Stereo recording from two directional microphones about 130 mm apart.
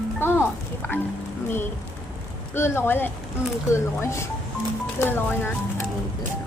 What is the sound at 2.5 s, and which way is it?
Speech, 20° left (ahead or behind).